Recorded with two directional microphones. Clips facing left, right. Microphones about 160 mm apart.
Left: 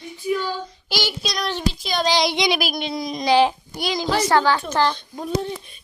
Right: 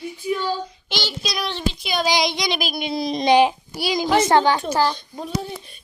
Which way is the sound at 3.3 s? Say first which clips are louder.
Right 1 dB; 15° right (ahead or behind).